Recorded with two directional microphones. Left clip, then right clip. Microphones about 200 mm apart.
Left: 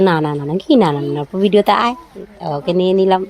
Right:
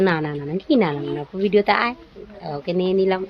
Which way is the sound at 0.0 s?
35° left (ahead or behind).